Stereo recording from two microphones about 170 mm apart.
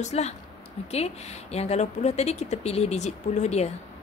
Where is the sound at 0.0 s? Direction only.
40° left (ahead or behind).